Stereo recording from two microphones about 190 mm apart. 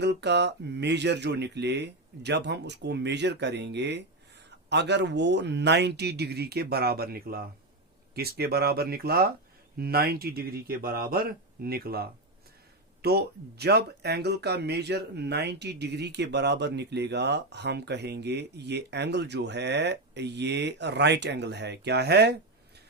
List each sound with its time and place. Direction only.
0.0 s speech: 65° right (ahead or behind)